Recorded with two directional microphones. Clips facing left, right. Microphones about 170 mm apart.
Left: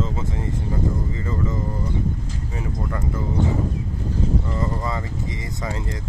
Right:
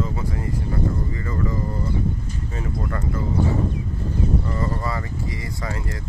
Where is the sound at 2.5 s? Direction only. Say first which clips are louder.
Even; 15° left (ahead or behind).